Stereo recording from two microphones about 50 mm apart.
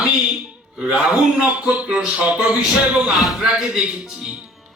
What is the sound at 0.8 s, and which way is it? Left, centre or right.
A man's voice, right.